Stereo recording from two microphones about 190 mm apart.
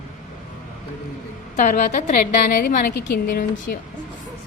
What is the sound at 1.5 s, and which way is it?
A woman's voice, 40° left (ahead or behind).